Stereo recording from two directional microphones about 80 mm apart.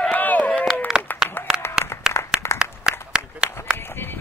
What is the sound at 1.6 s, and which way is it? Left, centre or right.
Applause, left.